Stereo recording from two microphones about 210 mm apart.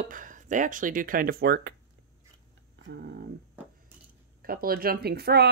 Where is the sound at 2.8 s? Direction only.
55° right (ahead or behind).